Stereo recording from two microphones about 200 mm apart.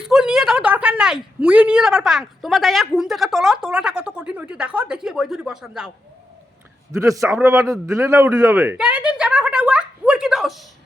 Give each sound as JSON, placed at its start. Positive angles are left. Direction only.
{"t": 0.0, "sound": "a woman's voice", "side_deg": -5}
{"t": 6.9, "sound": "a man's voice", "side_deg": -15}